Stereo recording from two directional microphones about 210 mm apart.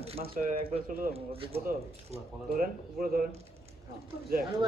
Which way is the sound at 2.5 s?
45° right (ahead or behind).